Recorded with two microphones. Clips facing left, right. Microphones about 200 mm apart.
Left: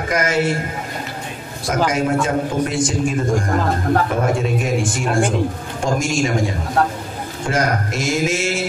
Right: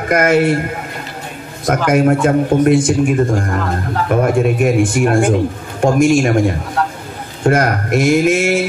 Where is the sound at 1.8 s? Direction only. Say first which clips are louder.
Right 7 dB; 60° right (ahead or behind).